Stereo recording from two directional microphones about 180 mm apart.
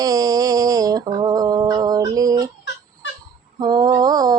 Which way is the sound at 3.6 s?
20° right (ahead or behind).